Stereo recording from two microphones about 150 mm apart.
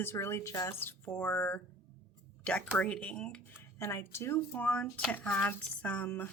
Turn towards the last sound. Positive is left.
turn(degrees=10)  # may be behind; listen again after turning